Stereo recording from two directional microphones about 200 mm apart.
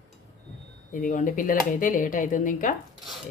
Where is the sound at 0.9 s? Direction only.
40° left (ahead or behind).